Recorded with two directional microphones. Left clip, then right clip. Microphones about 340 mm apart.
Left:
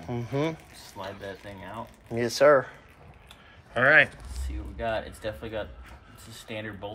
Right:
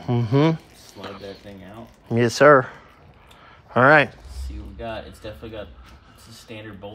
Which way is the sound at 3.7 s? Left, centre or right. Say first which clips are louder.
Right 5 dB; centre.